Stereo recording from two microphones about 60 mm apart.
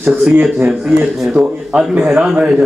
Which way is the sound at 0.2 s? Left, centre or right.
Right.